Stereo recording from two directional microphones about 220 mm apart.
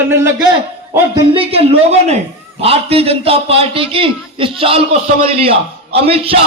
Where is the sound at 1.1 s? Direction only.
25° right (ahead or behind).